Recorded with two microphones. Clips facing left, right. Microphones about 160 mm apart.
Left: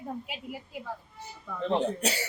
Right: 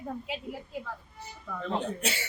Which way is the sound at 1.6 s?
25° left (ahead or behind).